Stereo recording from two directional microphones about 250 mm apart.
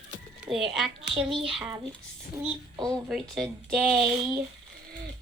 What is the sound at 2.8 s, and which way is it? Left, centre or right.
Speech, centre.